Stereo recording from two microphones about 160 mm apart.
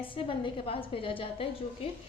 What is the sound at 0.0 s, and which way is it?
A woman's voice, 30° left (ahead or behind).